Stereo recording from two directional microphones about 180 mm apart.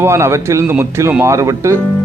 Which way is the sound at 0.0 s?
15° right (ahead or behind).